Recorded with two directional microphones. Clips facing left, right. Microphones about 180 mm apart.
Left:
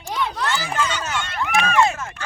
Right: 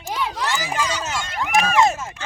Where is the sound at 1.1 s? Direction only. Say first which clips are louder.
Right 1 dB; 40° right (ahead or behind).